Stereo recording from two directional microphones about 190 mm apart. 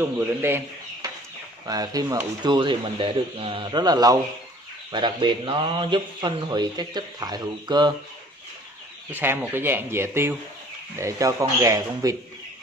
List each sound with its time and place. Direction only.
0.0 s speech: 10° right (ahead or behind)
1.0 s a sound: 20° right (ahead or behind)
1.7 s a man's voice: 20° right (ahead or behind)
9.1 s speech: 10° right (ahead or behind)